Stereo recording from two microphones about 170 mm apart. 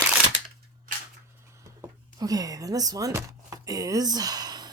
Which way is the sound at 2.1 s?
20° right (ahead or behind).